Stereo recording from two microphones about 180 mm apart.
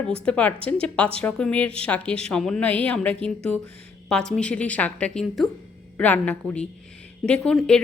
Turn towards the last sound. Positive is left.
turn(degrees=5)  # may be behind; listen again after turning